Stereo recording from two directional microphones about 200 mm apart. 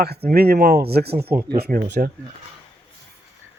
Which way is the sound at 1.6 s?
50° right (ahead or behind).